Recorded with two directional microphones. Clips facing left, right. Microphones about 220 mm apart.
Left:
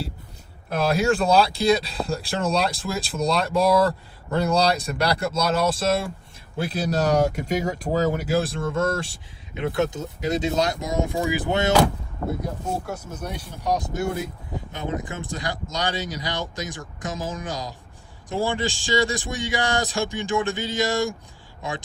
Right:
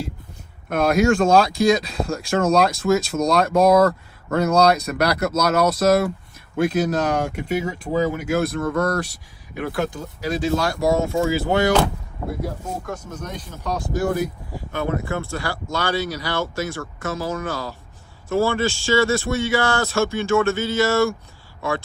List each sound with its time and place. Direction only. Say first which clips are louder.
0.7 s speech: right 4 dB; 30° left (ahead or behind)
12.2 s speech: left 1 dB; 5° right (ahead or behind)
12.8 s speech: right 1 dB; 10° left (ahead or behind)